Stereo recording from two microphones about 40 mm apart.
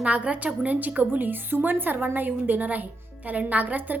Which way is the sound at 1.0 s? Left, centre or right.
Right.